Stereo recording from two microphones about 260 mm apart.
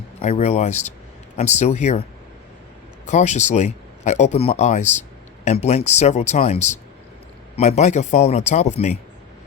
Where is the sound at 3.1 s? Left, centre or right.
Left.